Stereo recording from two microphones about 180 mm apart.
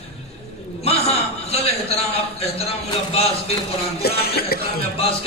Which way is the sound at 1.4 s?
35° left (ahead or behind).